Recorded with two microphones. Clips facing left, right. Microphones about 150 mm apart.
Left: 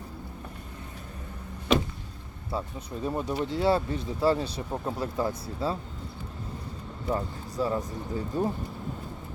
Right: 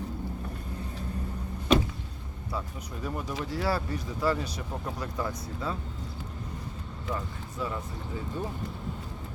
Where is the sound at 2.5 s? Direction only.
25° left (ahead or behind).